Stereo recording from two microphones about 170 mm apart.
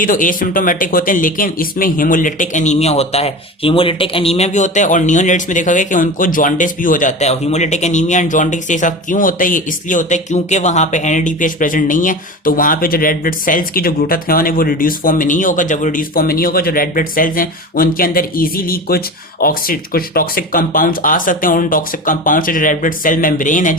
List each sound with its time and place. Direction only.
0.0 s speech: 55° left (ahead or behind)